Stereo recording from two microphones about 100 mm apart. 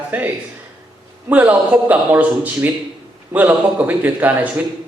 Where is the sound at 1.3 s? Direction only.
15° right (ahead or behind).